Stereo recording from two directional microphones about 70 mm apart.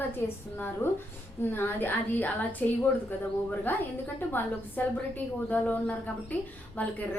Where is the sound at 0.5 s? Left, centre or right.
Left.